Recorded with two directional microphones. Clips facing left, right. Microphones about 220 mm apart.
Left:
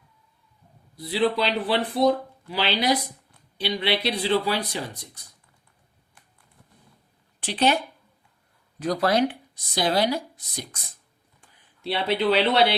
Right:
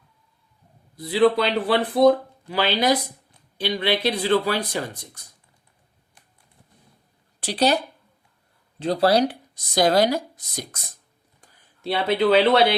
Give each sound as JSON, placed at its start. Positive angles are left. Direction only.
{"t": 0.9, "sound": "speech", "side_deg": -50}
{"t": 7.3, "sound": "speech", "side_deg": -40}
{"t": 8.8, "sound": "speech", "side_deg": -30}